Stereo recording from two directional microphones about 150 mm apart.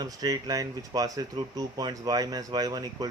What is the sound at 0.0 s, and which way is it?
Speech, 25° right (ahead or behind).